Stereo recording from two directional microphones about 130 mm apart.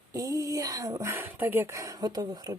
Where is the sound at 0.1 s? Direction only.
25° right (ahead or behind).